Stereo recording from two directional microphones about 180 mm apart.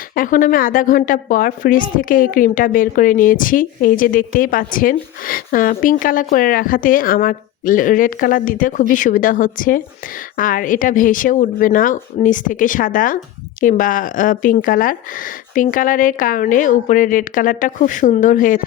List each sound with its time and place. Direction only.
0.1 s a woman's voice: 50° left (ahead or behind)